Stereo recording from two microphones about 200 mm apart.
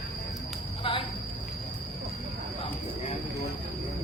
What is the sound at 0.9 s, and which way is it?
Speech, 25° left (ahead or behind).